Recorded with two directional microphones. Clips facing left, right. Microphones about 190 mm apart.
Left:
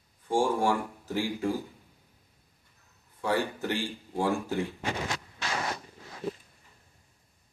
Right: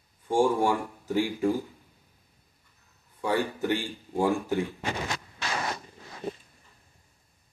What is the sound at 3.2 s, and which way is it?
Speech, 15° right (ahead or behind).